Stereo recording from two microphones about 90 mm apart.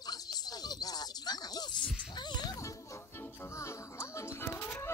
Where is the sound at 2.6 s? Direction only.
35° left (ahead or behind).